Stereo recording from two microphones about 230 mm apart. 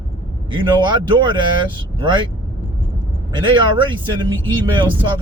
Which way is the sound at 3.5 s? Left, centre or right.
Right.